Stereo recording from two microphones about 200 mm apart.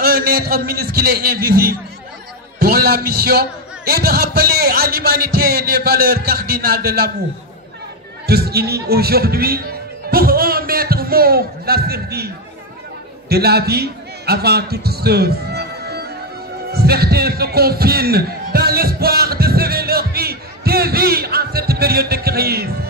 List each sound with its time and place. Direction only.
0.0 s a man's voice: 50° right (ahead or behind)
8.3 s a man's voice: 50° right (ahead or behind)
10.0 s a sound: 50° right (ahead or behind)
13.3 s a man's voice: 50° right (ahead or behind)